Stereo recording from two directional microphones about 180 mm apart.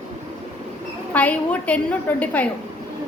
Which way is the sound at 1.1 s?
10° left (ahead or behind).